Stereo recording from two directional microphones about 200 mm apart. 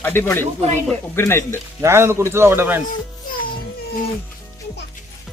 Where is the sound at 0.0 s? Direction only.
10° left (ahead or behind).